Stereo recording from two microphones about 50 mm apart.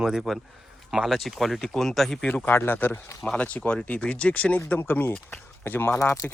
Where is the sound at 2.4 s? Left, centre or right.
Left.